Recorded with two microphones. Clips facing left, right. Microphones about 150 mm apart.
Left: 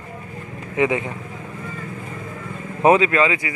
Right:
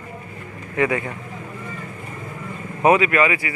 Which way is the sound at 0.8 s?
20° left (ahead or behind).